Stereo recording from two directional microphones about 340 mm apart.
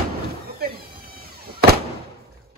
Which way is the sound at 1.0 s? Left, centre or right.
Right.